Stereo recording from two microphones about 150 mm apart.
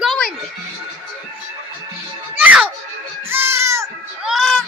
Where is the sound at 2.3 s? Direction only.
10° right (ahead or behind).